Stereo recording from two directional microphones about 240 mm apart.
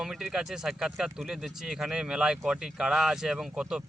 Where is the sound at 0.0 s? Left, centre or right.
Centre.